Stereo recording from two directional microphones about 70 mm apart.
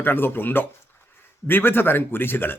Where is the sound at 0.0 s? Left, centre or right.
Left.